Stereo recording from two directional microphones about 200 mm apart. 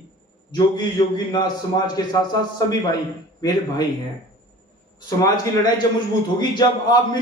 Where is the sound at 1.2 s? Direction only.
20° left (ahead or behind).